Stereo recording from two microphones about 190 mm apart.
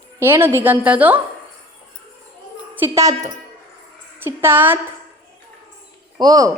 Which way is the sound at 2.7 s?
15° right (ahead or behind).